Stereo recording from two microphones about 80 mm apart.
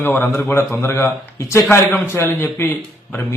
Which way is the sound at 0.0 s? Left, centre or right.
Left.